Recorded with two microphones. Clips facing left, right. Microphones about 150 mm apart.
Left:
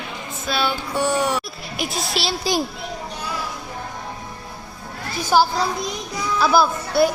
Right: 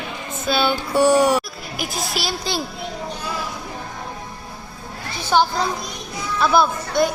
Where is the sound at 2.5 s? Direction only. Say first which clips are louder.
Left 6 dB; 10° left (ahead or behind).